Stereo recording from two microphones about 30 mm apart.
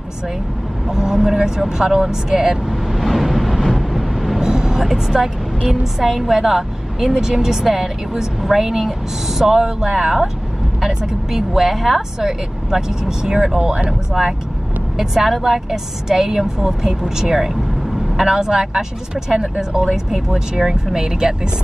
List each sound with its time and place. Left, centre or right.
0.8 s speech: centre
2.9 s vehicle: centre
4.4 s vehicle: right
5.7 s a woman's voice: centre
13.0 s speech: right
15.0 s a woman's voice: centre
15.7 s a woman's voice: centre